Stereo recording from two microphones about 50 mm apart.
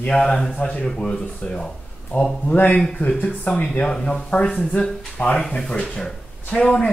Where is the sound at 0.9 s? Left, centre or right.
Centre.